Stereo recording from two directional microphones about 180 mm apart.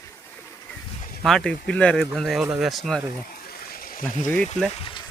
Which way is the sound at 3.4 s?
55° left (ahead or behind).